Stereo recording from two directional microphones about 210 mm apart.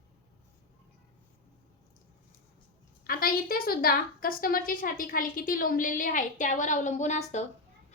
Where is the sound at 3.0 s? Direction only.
45° left (ahead or behind).